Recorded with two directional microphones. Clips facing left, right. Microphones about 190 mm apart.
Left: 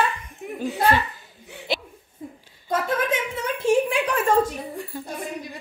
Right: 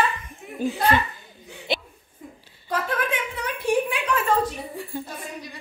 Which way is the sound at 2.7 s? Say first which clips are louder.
Left 3 dB; 25° left (ahead or behind).